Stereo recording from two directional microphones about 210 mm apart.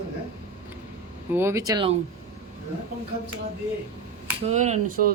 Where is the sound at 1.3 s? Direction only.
15° right (ahead or behind).